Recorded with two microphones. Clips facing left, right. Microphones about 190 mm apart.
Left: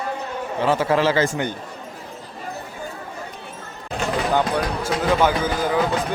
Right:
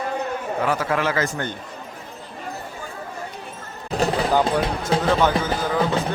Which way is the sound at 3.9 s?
40° right (ahead or behind).